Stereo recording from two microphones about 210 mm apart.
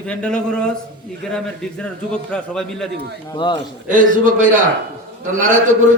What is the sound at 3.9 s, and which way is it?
Speech, 40° right (ahead or behind).